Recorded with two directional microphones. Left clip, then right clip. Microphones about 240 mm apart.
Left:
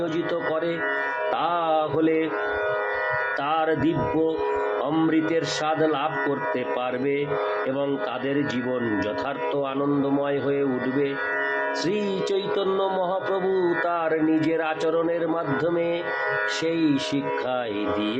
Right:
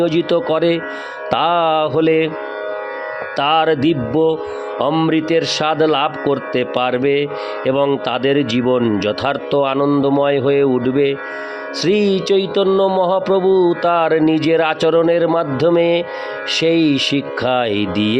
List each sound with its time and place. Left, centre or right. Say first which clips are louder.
0.0 s music: right 10 dB; right
1.3 s speech: right 10 dB; right
3.4 s speech: right 12 dB; right
11.9 s music: right 10 dB; right